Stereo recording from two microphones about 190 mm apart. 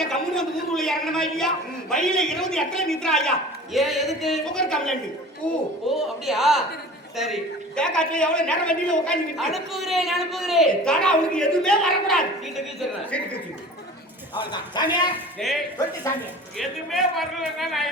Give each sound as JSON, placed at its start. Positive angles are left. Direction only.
{"t": 0.0, "sound": "a man's voice", "side_deg": 5}
{"t": 14.8, "sound": "a woman's voice", "side_deg": 20}
{"t": 15.4, "sound": "a man's voice", "side_deg": 0}
{"t": 16.6, "sound": "a man's voice", "side_deg": 0}